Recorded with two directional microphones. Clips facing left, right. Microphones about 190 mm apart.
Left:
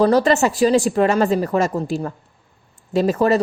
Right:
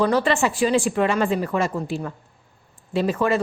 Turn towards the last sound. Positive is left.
turn(degrees=40)  # may be behind; listen again after turning